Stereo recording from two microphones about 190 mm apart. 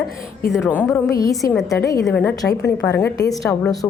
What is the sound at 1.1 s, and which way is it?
A woman's voice, 15° left (ahead or behind).